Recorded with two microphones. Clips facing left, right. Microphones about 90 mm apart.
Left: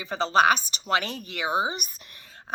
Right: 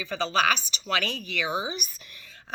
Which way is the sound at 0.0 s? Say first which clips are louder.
Left 4 dB; 40° left (ahead or behind).